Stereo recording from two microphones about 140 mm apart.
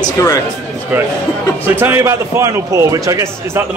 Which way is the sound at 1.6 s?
15° right (ahead or behind).